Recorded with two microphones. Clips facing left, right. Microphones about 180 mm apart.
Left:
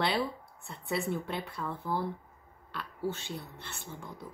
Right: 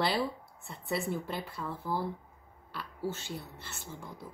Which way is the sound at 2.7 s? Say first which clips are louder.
Left 1 dB; 5° right (ahead or behind).